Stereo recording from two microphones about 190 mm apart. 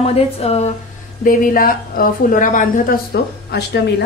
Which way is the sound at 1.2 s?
45° left (ahead or behind).